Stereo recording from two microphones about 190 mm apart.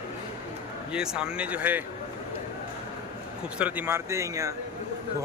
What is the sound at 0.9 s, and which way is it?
Speech, 5° right (ahead or behind).